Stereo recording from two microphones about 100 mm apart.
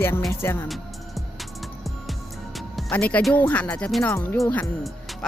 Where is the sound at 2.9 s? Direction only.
15° left (ahead or behind).